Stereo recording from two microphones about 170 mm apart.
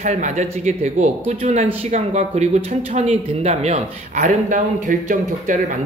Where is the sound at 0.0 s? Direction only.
40° right (ahead or behind).